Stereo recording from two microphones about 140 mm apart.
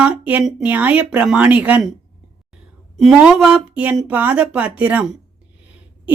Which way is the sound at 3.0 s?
5° right (ahead or behind).